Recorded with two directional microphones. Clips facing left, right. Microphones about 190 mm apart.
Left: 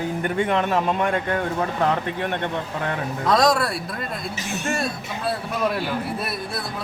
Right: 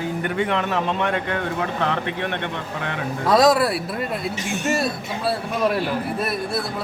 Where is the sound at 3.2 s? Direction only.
5° right (ahead or behind).